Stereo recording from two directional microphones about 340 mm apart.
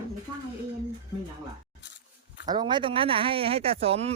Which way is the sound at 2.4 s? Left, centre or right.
Centre.